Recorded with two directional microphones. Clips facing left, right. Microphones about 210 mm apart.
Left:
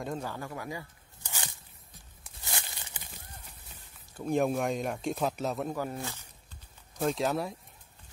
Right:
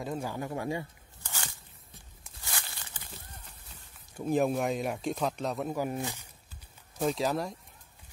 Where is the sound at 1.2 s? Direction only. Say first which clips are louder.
Even; 15° left (ahead or behind).